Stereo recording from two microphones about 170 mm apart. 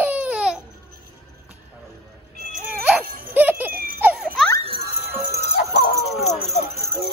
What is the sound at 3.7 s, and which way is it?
Baby laughter, 60° right (ahead or behind).